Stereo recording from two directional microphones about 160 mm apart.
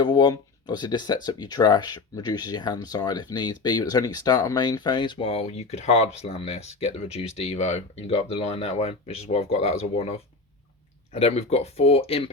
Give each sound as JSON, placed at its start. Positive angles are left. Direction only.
{"t": 0.0, "sound": "speech", "side_deg": 25}